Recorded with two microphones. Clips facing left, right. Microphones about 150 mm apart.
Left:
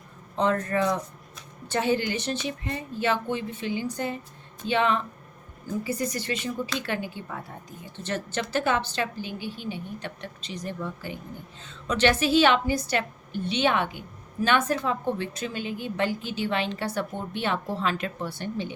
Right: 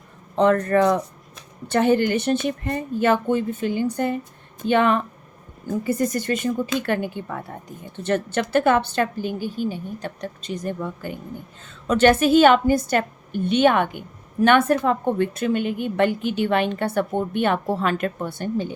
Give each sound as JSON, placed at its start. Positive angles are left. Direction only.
{"t": 0.3, "sound": "a woman's voice", "side_deg": -60}